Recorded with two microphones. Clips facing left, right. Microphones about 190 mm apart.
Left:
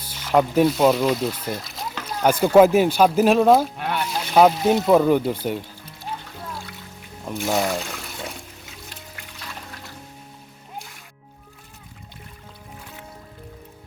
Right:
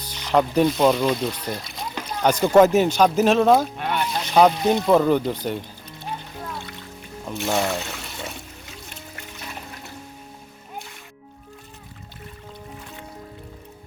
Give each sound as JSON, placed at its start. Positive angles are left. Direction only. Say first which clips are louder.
{"t": 0.1, "sound": "speech", "louder": "left 1 dB", "side_deg": 5}
{"t": 7.3, "sound": "speech", "louder": "left 1 dB", "side_deg": 5}